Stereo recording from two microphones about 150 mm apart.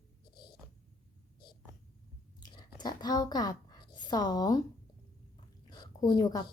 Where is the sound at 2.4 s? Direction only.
30° left (ahead or behind).